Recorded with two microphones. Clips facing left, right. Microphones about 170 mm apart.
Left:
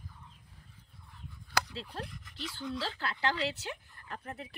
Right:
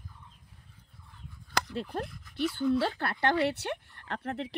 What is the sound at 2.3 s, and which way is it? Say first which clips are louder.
Speech: right 13 dB; 60° right (ahead or behind).